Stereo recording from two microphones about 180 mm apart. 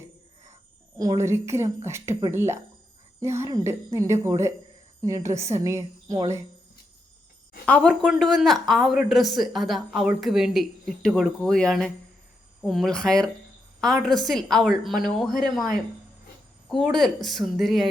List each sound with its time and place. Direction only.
0.9 s a woman's voice: 20° right (ahead or behind)
7.6 s a woman's voice: 5° left (ahead or behind)